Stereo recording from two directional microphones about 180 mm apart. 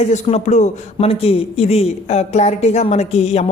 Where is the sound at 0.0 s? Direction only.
40° left (ahead or behind).